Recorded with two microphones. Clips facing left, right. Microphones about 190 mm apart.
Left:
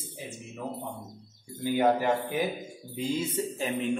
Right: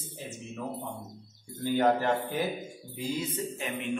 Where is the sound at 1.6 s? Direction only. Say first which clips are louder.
Left 1 dB; 10° left (ahead or behind).